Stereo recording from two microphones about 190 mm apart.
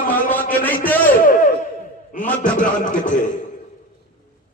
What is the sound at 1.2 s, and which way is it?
Speech, 45° left (ahead or behind).